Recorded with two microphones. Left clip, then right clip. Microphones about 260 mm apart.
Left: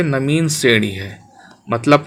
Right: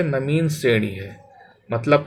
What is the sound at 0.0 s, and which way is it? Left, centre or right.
Speech, left.